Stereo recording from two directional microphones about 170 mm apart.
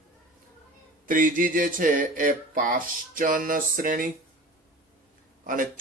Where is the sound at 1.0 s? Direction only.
50° right (ahead or behind).